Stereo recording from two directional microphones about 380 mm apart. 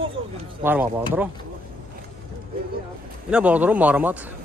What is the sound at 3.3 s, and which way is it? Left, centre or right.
Speech, centre.